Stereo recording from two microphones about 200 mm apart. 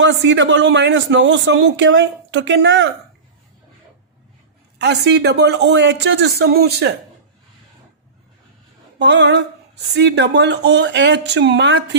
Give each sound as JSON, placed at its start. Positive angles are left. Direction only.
{"t": 0.0, "sound": "a man's voice", "side_deg": -65}
{"t": 4.8, "sound": "a man's voice", "side_deg": -55}
{"t": 9.0, "sound": "a sound", "side_deg": -60}
{"t": 9.9, "sound": "a man's voice", "side_deg": -60}